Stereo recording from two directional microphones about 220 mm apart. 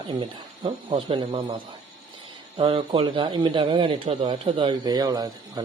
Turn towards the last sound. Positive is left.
turn(degrees=-15)  # may be behind; listen again after turning